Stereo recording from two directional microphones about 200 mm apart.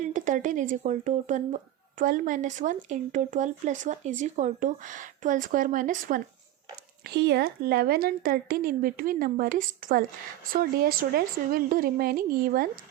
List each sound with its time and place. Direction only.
0.0 s speech: 40° right (ahead or behind)
7.0 s speech: 55° right (ahead or behind)